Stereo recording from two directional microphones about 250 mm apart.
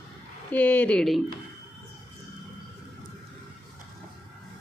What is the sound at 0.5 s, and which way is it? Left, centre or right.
Speech, centre.